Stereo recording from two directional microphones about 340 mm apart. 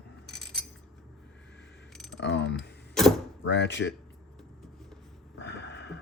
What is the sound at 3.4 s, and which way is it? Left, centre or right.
Speech, left.